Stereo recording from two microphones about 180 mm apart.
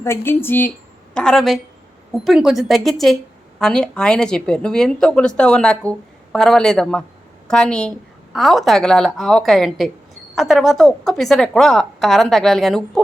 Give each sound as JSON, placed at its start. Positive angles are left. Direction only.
{"t": 0.0, "sound": "a woman's voice", "side_deg": 15}